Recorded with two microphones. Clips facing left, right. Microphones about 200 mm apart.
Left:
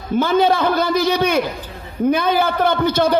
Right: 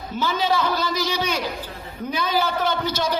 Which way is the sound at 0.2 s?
55° left (ahead or behind).